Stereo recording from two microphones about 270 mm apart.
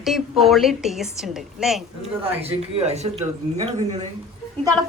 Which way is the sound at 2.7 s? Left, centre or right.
Right.